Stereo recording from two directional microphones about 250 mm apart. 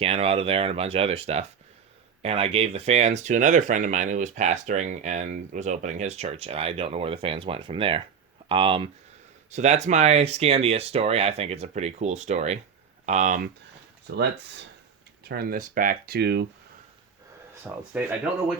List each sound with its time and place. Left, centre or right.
0.0 s speech: right
14.2 s speech: right
17.5 s speech: centre